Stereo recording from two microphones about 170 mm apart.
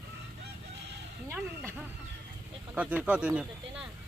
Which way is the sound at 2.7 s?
10° right (ahead or behind).